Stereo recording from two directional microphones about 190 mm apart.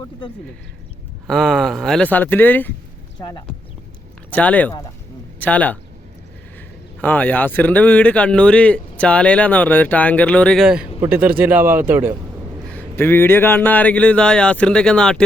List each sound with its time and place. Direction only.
1.3 s speech: centre (ahead or behind)
3.2 s speech: 20° left (ahead or behind)
4.3 s speech: 5° left (ahead or behind)
7.0 s a man's voice: 10° left (ahead or behind); by 12.1 s 10° right (ahead or behind)
12.7 s speech: 10° left (ahead or behind)